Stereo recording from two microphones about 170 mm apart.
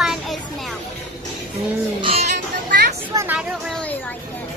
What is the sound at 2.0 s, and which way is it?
Speech, 35° right (ahead or behind).